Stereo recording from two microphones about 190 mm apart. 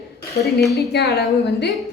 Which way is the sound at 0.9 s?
60° left (ahead or behind).